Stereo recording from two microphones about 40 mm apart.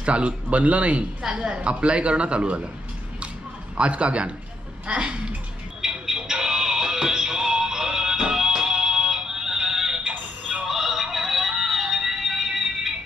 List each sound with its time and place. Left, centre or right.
0.0 s a man's voice: right
1.4 s a man's voice: right
3.7 s a man's voice: right
5.8 s music: centre